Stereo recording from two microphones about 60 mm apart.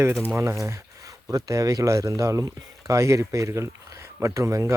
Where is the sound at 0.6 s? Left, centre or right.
Right.